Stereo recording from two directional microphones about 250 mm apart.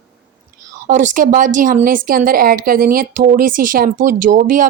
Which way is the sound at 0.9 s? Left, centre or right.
Right.